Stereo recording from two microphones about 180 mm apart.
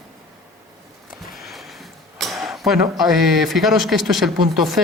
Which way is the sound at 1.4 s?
Centre (ahead or behind).